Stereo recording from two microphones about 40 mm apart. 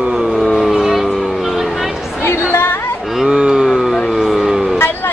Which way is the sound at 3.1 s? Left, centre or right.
Centre.